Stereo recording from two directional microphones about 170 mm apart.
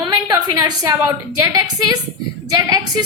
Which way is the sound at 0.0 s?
25° right (ahead or behind).